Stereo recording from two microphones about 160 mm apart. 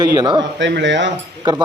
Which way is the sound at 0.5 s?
90° right.